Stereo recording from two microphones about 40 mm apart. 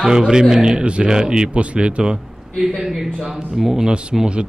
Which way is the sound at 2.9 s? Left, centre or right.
Centre.